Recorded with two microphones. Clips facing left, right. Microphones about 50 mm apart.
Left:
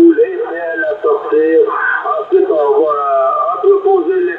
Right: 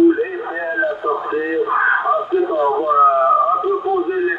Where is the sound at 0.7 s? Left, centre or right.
Centre.